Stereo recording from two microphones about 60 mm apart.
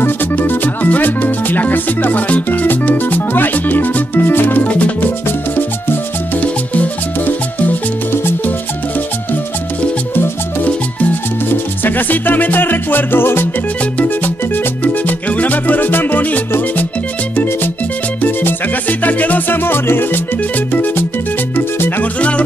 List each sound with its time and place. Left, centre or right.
0.0 s music: left
4.6 s music: left
10.1 s music: left
11.8 s music: left
18.2 s music: left